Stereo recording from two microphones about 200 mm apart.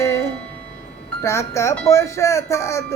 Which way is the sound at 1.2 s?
15° left (ahead or behind).